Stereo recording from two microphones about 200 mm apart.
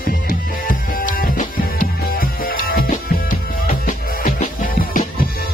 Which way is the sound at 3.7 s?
35° left (ahead or behind).